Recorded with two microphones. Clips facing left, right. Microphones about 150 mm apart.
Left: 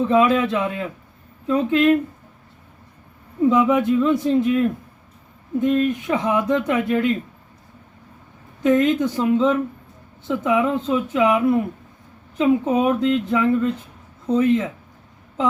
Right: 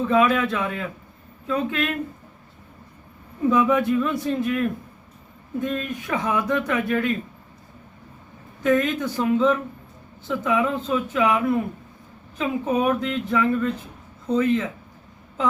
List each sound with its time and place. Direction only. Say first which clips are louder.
0.1 s speech: left 1 dB; 25° left (ahead or behind)
3.5 s speech: left 1 dB; 20° left (ahead or behind)
8.6 s speech: left 4 dB; 20° left (ahead or behind)